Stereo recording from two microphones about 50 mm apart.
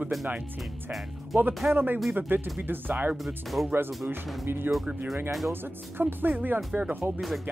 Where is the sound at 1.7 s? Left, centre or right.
Right.